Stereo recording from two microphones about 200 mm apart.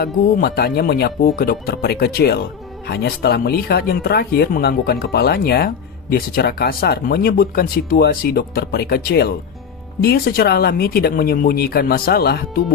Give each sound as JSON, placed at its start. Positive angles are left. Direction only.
{"t": 0.0, "sound": "speech", "side_deg": 50}